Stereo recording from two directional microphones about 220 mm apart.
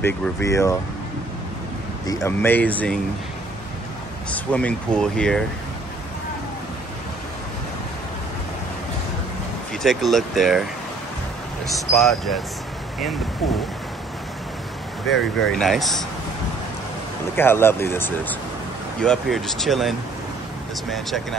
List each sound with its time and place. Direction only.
0.0 s speech: 15° left (ahead or behind)
2.0 s speech: 10° left (ahead or behind)
4.3 s speech: 5° left (ahead or behind)
9.8 s speech: centre (ahead or behind)
11.6 s speech: centre (ahead or behind)
15.1 s speech: 60° left (ahead or behind)
15.5 s speech: centre (ahead or behind)
17.4 s speech: 10° left (ahead or behind)
20.9 s speech: centre (ahead or behind)